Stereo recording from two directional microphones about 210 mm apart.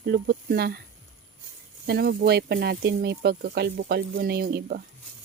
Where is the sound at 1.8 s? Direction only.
50° right (ahead or behind).